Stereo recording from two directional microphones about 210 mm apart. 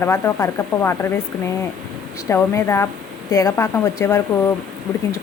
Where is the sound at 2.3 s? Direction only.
15° left (ahead or behind).